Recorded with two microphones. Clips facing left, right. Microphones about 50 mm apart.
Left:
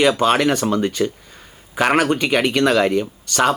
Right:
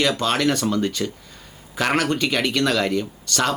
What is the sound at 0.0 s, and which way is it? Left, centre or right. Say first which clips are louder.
Speech: left 5 dB; centre.